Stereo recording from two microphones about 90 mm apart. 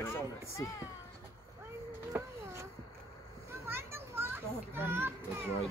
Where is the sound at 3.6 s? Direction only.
25° right (ahead or behind).